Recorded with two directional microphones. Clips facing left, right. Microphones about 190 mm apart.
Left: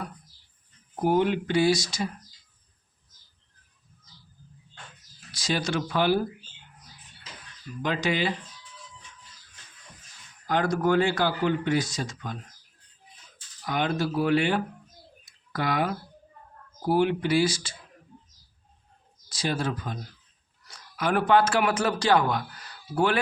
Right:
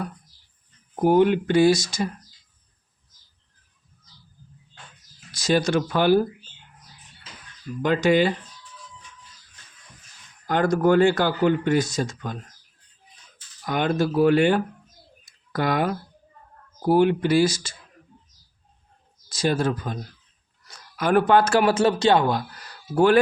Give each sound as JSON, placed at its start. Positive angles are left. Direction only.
{"t": 1.0, "sound": "speech", "side_deg": -55}
{"t": 5.3, "sound": "speech", "side_deg": -45}
{"t": 7.8, "sound": "speech", "side_deg": -50}
{"t": 10.4, "sound": "speech", "side_deg": -50}
{"t": 13.7, "sound": "speech", "side_deg": -50}
{"t": 19.3, "sound": "a man's voice", "side_deg": -45}
{"t": 23.0, "sound": "speech", "side_deg": -45}